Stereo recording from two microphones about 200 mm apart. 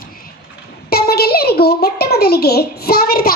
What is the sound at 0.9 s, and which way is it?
A child's voice, 50° left (ahead or behind).